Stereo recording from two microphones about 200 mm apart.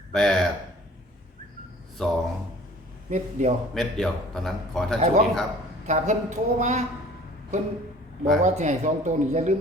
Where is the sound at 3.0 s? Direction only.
35° right (ahead or behind).